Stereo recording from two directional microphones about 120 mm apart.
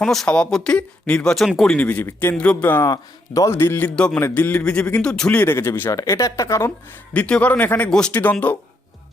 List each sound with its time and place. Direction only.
0.0 s a man's voice: 5° left (ahead or behind)
2.8 s a man's voice: 30° left (ahead or behind)
7.1 s a man's voice: 10° left (ahead or behind)